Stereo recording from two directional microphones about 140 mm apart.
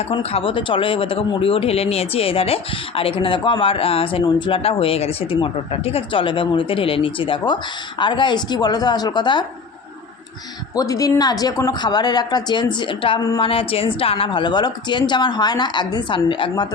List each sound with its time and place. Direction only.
0.1 s speech: 45° left (ahead or behind)
10.8 s speech: 25° left (ahead or behind)